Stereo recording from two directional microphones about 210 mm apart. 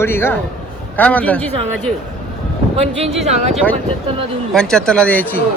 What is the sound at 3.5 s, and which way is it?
Speech, 5° left (ahead or behind).